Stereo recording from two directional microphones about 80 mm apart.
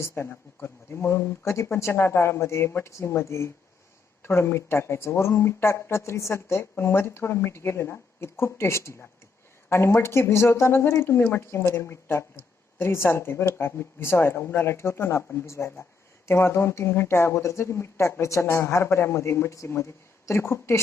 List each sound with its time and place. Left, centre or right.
0.3 s speech: left